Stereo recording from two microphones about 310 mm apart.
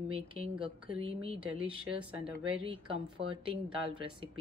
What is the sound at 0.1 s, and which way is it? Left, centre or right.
Speech, centre.